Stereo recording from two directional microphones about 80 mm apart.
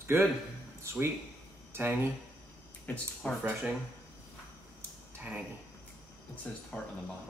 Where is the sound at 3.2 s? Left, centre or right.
Centre.